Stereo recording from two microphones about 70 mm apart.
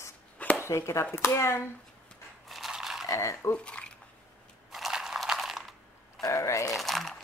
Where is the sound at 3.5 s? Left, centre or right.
Centre.